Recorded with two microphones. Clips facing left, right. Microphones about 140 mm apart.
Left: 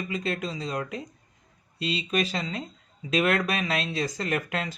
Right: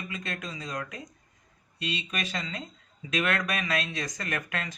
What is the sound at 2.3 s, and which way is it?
Speech, 35° left (ahead or behind).